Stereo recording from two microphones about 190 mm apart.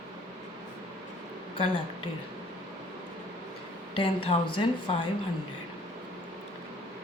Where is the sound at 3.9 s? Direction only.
30° left (ahead or behind).